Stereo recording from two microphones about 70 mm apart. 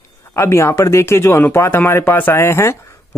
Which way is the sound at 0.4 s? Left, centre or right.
Left.